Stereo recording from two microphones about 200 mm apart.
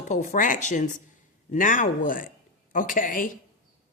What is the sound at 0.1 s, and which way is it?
A woman's voice, 40° left (ahead or behind).